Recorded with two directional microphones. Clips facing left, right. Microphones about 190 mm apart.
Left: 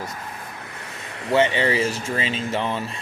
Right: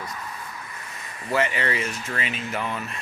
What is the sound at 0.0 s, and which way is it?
Vehicle, 45° left (ahead or behind).